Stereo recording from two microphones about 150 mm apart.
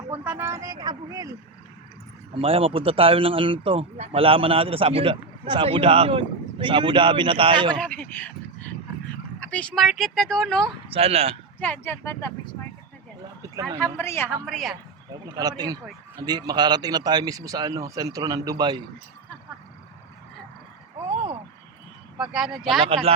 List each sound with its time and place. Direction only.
0.1 s speech: 15° right (ahead or behind)
2.3 s speech: 40° right (ahead or behind)
7.8 s speech: 10° left (ahead or behind)
9.4 s speech: 10° left (ahead or behind)
10.9 s speech: 40° right (ahead or behind)
11.6 s speech: 10° left (ahead or behind)
13.4 s speech: 25° right (ahead or behind)
13.7 s speech: 10° left (ahead or behind)
14.4 s speech: centre (ahead or behind)
15.1 s speech: 25° right (ahead or behind)
22.3 s speech: 5° right (ahead or behind)